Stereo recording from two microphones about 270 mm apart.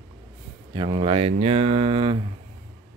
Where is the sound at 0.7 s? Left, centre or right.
Centre.